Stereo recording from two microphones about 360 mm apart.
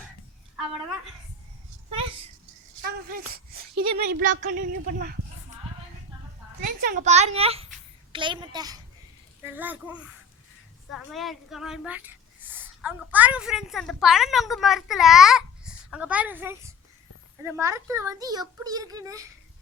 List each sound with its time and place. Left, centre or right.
2.8 s a sound: right
3.9 s a woman's voice: right
6.6 s a child's voice: right